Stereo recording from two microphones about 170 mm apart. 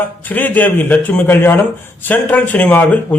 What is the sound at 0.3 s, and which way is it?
Speech, 10° left (ahead or behind).